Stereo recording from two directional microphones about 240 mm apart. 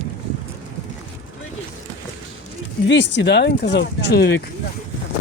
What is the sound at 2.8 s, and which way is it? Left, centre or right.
Speech, left.